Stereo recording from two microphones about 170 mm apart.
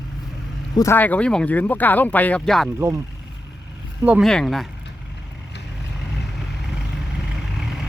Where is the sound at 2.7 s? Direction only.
15° right (ahead or behind).